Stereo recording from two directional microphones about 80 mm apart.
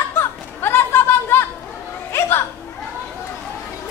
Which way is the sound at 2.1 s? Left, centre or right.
Left.